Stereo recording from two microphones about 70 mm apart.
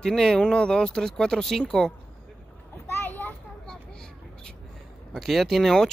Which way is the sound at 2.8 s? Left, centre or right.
Left.